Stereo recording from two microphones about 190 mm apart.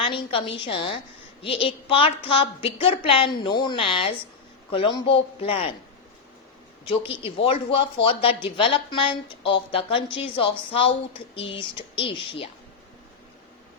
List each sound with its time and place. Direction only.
0.0 s a woman's voice: 30° left (ahead or behind)
6.8 s a woman's voice: 30° left (ahead or behind)